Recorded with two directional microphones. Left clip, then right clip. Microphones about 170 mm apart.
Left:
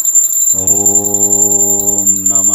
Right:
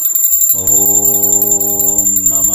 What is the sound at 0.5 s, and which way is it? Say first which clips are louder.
Music: left 2 dB; 15° left (ahead or behind).